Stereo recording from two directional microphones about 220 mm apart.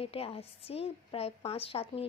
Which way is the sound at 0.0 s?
25° left (ahead or behind).